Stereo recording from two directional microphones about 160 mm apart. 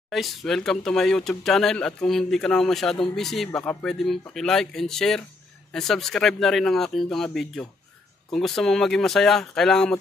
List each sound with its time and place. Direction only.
0.1 s speech: centre (ahead or behind)